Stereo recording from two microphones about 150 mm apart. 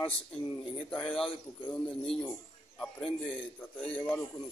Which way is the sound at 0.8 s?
5° left (ahead or behind).